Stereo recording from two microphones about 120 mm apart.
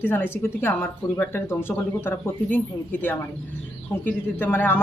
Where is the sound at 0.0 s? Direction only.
20° left (ahead or behind).